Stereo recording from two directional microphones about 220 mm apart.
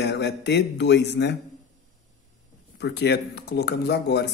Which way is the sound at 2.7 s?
50° left (ahead or behind).